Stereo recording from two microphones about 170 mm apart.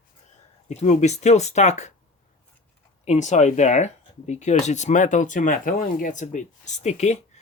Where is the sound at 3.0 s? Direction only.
45° left (ahead or behind).